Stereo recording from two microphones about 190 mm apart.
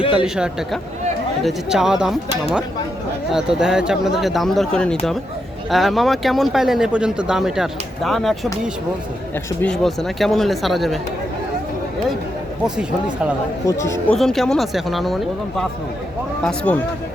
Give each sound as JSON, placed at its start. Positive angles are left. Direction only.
{"t": 0.3, "sound": "speech", "side_deg": -5}
{"t": 3.3, "sound": "speech", "side_deg": -5}
{"t": 9.6, "sound": "speech", "side_deg": 5}
{"t": 13.7, "sound": "speech", "side_deg": 15}
{"t": 14.1, "sound": "speech", "side_deg": 0}